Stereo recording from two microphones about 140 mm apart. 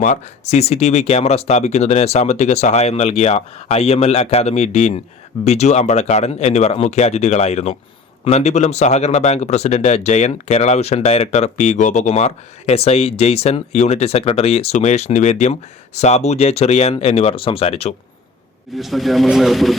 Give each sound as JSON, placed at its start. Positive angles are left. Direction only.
{"t": 0.0, "sound": "speech", "side_deg": 55}
{"t": 18.8, "sound": "speech", "side_deg": 0}